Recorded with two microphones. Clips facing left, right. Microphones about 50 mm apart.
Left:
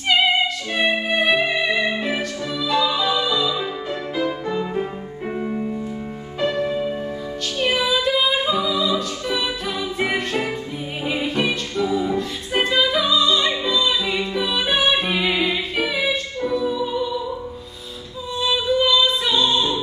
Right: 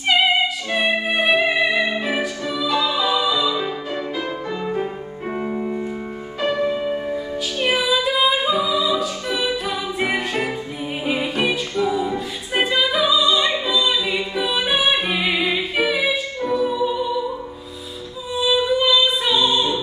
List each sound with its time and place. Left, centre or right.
0.7 s music: centre
5.3 s music: centre
6.4 s music: centre
11.1 s a capella: centre
18.4 s music: centre